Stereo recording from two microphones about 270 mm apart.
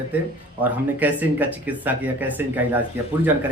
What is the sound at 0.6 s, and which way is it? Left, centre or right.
Speech, centre.